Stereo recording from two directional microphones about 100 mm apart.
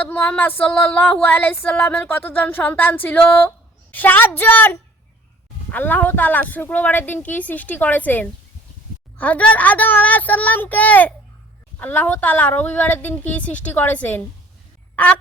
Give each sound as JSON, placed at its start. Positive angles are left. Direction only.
{"t": 0.0, "sound": "music", "side_deg": 20}
{"t": 3.9, "sound": "a woman's voice", "side_deg": 20}
{"t": 5.7, "sound": "music", "side_deg": 15}